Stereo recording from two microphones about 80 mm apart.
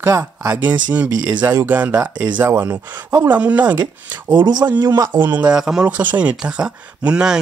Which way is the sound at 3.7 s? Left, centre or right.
Right.